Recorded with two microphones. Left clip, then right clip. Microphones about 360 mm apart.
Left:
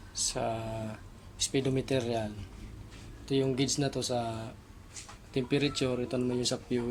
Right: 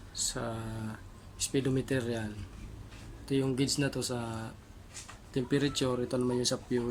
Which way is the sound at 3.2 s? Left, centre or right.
Centre.